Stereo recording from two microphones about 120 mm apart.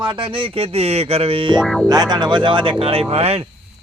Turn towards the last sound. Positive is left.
turn(degrees=-55)  # may be behind; listen again after turning